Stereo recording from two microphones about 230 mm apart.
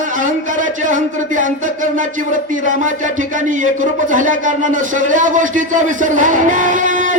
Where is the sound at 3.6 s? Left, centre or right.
Right.